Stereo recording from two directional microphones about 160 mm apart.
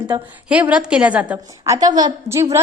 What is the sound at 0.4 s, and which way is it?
A woman's voice, 10° right (ahead or behind).